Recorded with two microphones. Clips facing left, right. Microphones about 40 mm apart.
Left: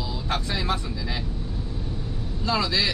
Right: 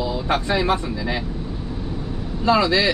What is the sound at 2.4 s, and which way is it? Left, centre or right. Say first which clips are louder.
Speech: right 7 dB; right.